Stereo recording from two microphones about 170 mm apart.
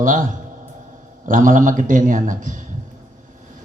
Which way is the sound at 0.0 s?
50° right (ahead or behind).